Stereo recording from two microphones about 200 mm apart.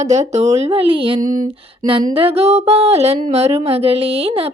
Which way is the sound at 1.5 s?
25° right (ahead or behind).